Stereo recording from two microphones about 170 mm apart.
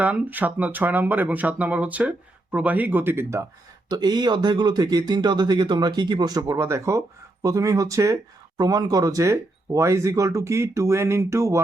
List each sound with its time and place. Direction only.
0.0 s speech: 10° right (ahead or behind)